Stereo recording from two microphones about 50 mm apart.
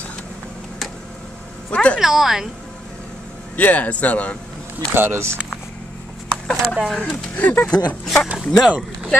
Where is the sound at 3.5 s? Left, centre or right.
Left.